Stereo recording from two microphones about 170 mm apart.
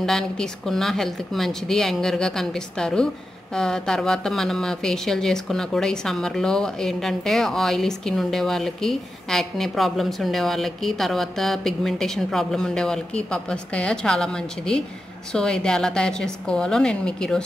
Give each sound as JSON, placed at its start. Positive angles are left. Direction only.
{"t": 0.0, "sound": "a woman's voice", "side_deg": 0}